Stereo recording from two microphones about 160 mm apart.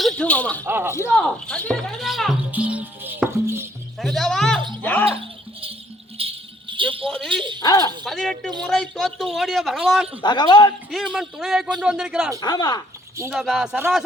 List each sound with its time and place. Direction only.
0.0 s speech: 10° left (ahead or behind)
0.6 s speech: 15° right (ahead or behind)
0.9 s music: 10° left (ahead or behind); by 3.7 s 15° right (ahead or behind)
3.9 s a sound: centre (ahead or behind)
6.1 s music: 35° right (ahead or behind)
7.1 s a sound: 5° left (ahead or behind)
7.6 s a man's voice: 25° left (ahead or behind)
8.0 s a man's voice: centre (ahead or behind)
10.2 s a man's voice: 30° left (ahead or behind)
10.9 s a man's voice: 5° right (ahead or behind)
12.4 s a man's voice: 25° left (ahead or behind)
13.3 s a man's voice: 5° right (ahead or behind)